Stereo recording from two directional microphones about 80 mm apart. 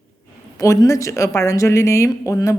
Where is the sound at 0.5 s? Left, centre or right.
Left.